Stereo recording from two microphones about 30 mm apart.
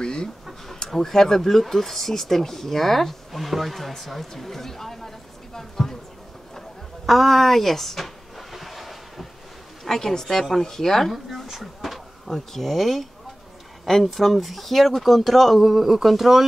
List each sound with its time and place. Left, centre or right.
0.0 s chicken: left
0.8 s speech: centre
7.1 s vehicle: centre
9.8 s speech: centre
11.5 s speech: centre
12.3 s speech: centre
15.6 s speech: centre